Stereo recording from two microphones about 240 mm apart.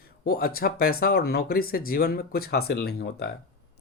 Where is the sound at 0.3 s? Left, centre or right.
Left.